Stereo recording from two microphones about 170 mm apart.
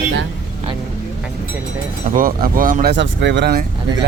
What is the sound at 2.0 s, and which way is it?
Speech, 55° right (ahead or behind).